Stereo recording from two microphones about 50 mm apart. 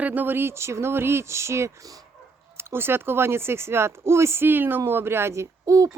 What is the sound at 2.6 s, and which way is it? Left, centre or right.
Speech, right.